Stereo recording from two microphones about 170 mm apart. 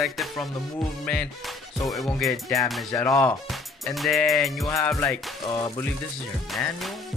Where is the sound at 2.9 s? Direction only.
15° left (ahead or behind).